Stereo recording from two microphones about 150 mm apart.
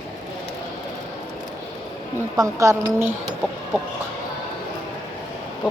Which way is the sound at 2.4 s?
20° right (ahead or behind).